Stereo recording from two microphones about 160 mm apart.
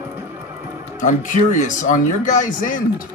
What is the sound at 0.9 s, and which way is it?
Speech, 55° left (ahead or behind).